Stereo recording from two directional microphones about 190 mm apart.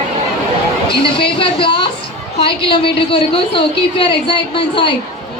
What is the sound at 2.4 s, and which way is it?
A woman's voice, 25° left (ahead or behind).